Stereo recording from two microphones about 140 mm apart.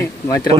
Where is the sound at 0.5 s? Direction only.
30° right (ahead or behind).